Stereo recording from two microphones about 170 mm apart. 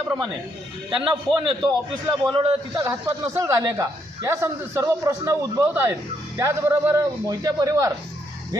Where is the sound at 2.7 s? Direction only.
20° right (ahead or behind).